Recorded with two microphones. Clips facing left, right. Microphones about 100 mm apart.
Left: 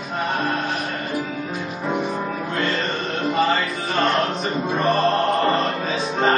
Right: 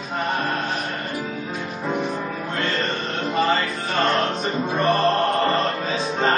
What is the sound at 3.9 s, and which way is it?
Music, centre (ahead or behind).